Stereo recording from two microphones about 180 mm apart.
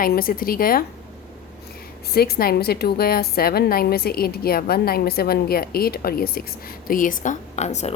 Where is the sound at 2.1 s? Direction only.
60° left (ahead or behind).